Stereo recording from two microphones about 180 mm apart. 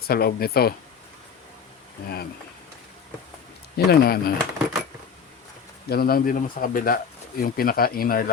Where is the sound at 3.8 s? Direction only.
60° left (ahead or behind).